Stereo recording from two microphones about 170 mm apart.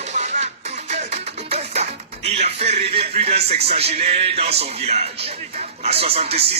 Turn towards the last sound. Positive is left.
turn(degrees=-35)  # may be behind; listen again after turning